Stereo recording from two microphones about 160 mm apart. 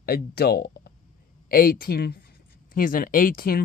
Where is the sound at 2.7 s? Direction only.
60° left (ahead or behind).